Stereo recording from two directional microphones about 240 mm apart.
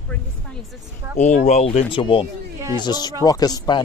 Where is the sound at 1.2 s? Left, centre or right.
Left.